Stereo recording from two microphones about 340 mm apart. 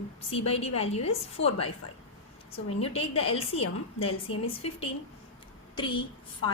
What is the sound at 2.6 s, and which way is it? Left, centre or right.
A woman's voice, centre.